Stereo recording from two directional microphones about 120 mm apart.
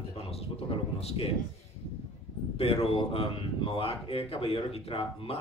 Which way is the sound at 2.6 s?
55° left (ahead or behind).